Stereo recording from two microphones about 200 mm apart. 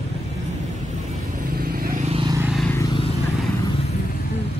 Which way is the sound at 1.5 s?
50° right (ahead or behind).